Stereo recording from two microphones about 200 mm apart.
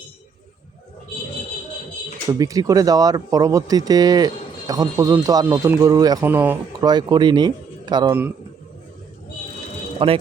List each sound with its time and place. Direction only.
2.4 s speech: 15° right (ahead or behind)
6.9 s speech: 20° right (ahead or behind)
10.0 s speech: 25° right (ahead or behind)